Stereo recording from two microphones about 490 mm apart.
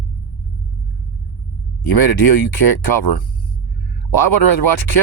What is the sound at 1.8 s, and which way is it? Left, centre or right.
Speech, left.